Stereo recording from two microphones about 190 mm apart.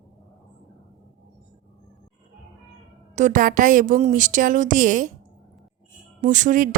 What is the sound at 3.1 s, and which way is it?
A woman's voice, 40° right (ahead or behind).